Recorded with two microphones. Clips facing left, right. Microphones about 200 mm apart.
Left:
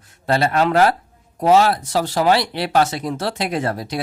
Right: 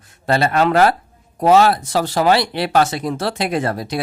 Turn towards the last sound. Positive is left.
turn(degrees=-65)  # may be behind; listen again after turning